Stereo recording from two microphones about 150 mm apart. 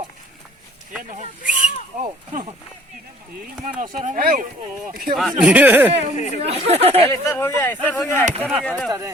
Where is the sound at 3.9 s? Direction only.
55° right (ahead or behind).